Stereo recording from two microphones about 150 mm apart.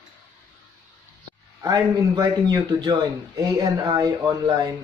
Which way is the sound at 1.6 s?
25° right (ahead or behind).